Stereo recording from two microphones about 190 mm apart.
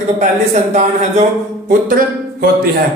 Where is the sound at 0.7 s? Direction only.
35° right (ahead or behind).